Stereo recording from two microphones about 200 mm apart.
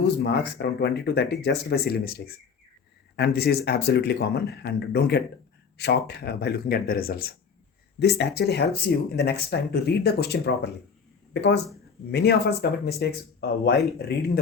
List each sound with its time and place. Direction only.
0.2 s speech: 55° left (ahead or behind)